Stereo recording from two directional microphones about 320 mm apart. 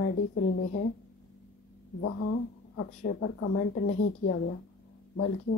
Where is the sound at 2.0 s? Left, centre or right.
Left.